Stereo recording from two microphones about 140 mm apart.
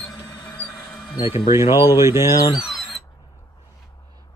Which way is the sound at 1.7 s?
15° right (ahead or behind).